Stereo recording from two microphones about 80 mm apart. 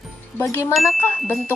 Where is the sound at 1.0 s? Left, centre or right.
Left.